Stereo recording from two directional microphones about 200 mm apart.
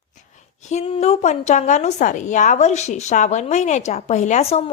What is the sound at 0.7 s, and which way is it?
A woman's voice, 30° left (ahead or behind).